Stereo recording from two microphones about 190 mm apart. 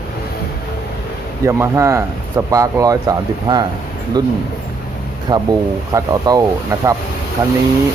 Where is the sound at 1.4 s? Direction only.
15° right (ahead or behind).